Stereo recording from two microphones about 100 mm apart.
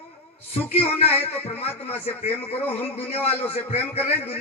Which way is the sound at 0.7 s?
90° left.